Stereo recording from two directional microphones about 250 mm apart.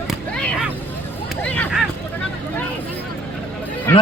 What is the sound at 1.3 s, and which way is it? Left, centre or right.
Hubbub, centre.